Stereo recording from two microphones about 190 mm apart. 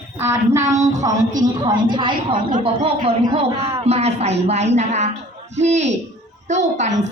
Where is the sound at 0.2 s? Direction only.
15° right (ahead or behind).